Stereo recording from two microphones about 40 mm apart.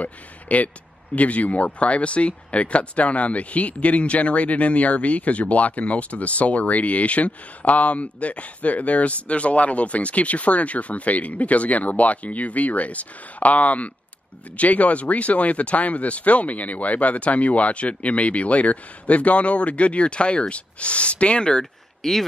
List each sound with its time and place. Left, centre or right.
0.0 s speech: left
22.0 s speech: centre